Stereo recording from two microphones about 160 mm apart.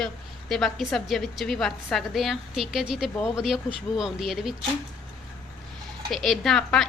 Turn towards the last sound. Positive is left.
turn(degrees=5)  # may be behind; listen again after turning